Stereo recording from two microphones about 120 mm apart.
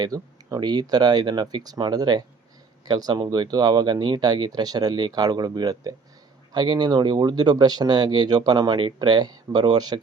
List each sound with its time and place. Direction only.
0.0 s speech: 30° right (ahead or behind)